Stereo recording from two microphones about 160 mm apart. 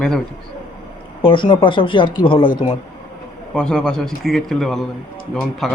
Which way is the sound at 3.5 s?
5° left (ahead or behind).